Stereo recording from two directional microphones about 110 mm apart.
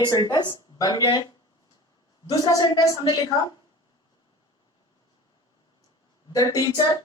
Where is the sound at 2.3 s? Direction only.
30° left (ahead or behind).